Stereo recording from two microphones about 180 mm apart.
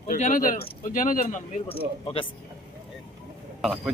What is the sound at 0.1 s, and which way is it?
Speech, 45° left (ahead or behind).